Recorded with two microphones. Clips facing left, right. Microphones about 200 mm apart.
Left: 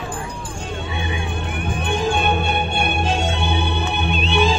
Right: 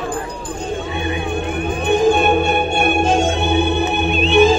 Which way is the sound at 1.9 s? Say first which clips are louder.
Right 7 dB; 50° right (ahead or behind).